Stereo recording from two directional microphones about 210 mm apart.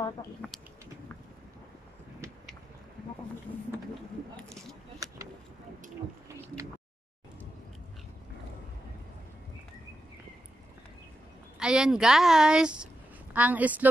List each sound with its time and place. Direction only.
0.4 s speech: 5° left (ahead or behind)
4.9 s vehicle: 15° right (ahead or behind)
6.2 s a sound: 15° right (ahead or behind)
11.6 s a woman's voice: 5° right (ahead or behind)